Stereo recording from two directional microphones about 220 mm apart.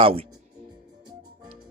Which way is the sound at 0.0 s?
25° right (ahead or behind).